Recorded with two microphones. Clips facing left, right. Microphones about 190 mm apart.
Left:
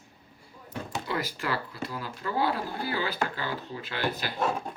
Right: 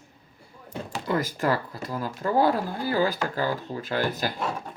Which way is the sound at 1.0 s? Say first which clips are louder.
Right 9 dB; 45° right (ahead or behind).